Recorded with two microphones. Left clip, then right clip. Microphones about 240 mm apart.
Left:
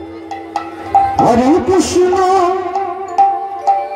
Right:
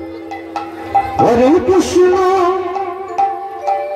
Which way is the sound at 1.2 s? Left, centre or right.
Left.